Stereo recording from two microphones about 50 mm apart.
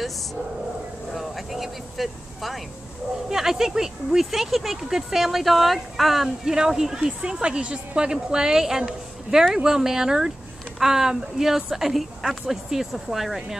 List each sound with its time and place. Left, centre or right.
1.1 s vehicle: centre
3.3 s speech: centre